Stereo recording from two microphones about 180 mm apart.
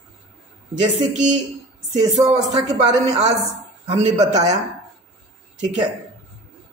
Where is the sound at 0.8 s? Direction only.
40° right (ahead or behind).